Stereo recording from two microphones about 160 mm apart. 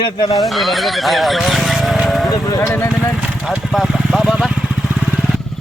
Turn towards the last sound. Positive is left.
turn(degrees=0)  # may be behind; listen again after turning